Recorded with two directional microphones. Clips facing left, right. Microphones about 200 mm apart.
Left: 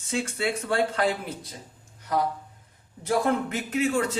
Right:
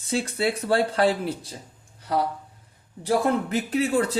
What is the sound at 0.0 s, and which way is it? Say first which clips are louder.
Speech: right 3 dB; 35° right (ahead or behind).